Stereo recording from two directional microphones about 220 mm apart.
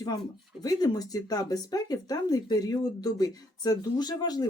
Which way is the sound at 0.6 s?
15° left (ahead or behind).